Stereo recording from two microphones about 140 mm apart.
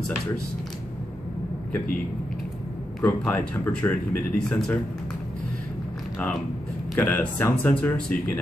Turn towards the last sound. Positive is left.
turn(degrees=10)  # may be behind; listen again after turning